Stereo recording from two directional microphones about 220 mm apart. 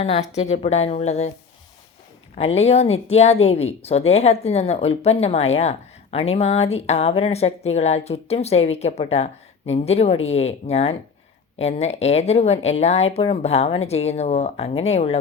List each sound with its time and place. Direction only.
0.0 s speech: 30° left (ahead or behind)
2.3 s speech: 30° left (ahead or behind)